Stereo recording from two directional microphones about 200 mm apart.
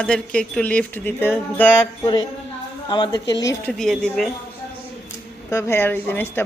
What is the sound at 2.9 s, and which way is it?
Speech, 20° left (ahead or behind).